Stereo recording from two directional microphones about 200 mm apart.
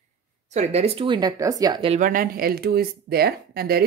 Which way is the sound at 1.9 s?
40° right (ahead or behind).